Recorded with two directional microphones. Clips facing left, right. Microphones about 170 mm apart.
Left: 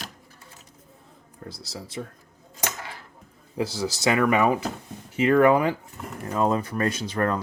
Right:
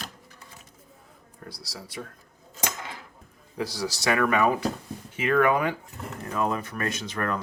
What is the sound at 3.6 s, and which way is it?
Speech, 25° left (ahead or behind).